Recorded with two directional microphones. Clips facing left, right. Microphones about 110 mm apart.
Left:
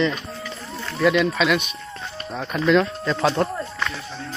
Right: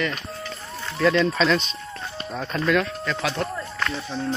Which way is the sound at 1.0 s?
10° left (ahead or behind).